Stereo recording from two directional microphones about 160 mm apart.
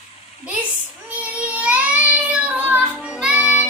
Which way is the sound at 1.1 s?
10° right (ahead or behind).